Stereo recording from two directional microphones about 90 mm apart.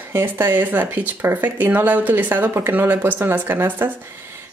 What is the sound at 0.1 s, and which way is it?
Speech, 25° right (ahead or behind).